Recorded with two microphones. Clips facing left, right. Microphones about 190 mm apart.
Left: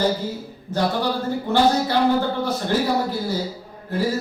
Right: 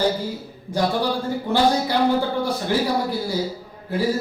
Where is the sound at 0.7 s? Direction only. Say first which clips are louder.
Right 1 dB; 15° right (ahead or behind).